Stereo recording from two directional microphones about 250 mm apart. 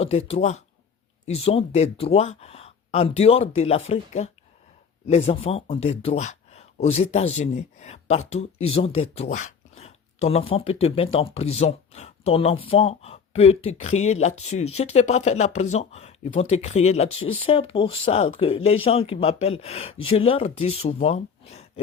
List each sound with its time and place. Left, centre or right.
0.0 s speech: left